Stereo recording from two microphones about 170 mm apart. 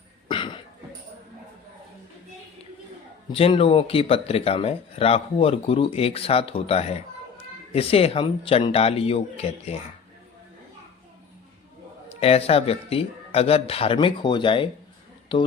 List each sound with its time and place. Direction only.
0.3 s cough: 30° left (ahead or behind)
3.3 s speech: 35° left (ahead or behind)
12.0 s speech: 35° left (ahead or behind)